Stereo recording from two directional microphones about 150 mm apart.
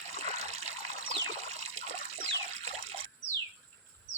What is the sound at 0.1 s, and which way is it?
Trickle, 45° right (ahead or behind).